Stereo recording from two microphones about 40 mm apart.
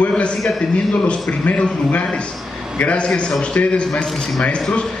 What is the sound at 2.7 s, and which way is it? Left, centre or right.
A man's voice, left.